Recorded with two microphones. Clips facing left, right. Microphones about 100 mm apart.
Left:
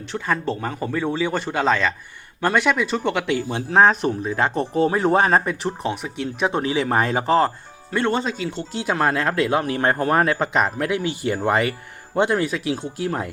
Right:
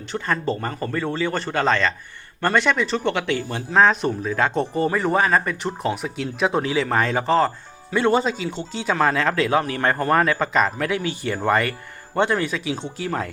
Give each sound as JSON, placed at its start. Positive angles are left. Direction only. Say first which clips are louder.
{"t": 0.1, "sound": "speech", "louder": "even", "side_deg": 0}
{"t": 5.6, "sound": "speech", "louder": "even", "side_deg": 0}
{"t": 6.6, "sound": "speech", "louder": "left 2 dB", "side_deg": 15}
{"t": 7.9, "sound": "speech", "louder": "right 3 dB", "side_deg": -5}